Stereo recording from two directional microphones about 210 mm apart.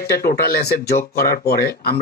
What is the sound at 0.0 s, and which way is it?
Speech, 45° left (ahead or behind).